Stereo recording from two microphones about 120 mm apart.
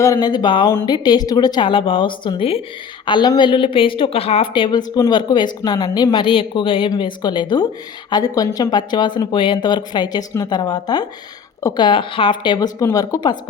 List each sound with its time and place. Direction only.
0.0 s speech: 30° left (ahead or behind); by 2.6 s 50° left (ahead or behind)
3.1 s a woman's voice: 40° left (ahead or behind)